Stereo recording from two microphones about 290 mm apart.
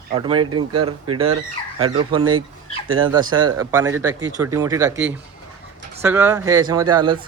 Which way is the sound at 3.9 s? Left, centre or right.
Right.